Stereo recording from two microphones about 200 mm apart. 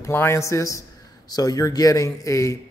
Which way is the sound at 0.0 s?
10° left (ahead or behind).